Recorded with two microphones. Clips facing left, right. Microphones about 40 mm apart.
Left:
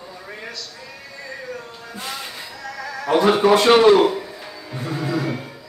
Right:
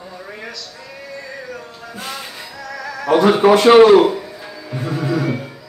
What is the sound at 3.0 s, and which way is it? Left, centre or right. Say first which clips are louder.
Speech: right 4 dB; centre.